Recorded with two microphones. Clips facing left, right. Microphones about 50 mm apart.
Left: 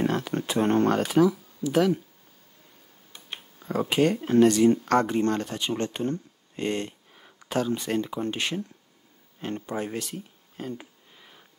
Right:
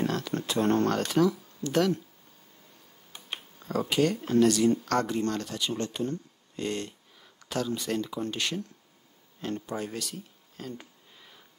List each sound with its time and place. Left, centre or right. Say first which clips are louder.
0.0 s speech: left 3 dB; left
3.6 s speech: left 3 dB; centre
9.4 s a sound: left 2 dB; left